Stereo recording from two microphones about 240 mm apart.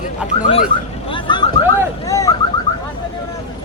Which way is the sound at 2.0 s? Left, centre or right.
Centre.